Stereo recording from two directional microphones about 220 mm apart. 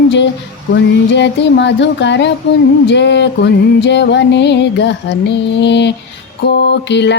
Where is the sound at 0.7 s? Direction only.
50° left (ahead or behind).